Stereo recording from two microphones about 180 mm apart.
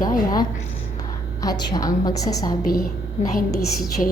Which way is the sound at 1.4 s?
20° left (ahead or behind).